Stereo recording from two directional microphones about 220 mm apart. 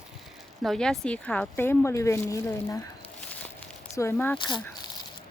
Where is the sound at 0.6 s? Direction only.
Centre (ahead or behind).